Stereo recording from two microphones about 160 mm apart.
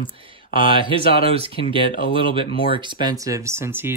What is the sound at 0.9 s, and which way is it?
Speech, 35° right (ahead or behind).